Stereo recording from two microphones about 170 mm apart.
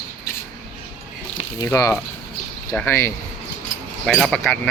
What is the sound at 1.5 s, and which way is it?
Speech, 20° left (ahead or behind).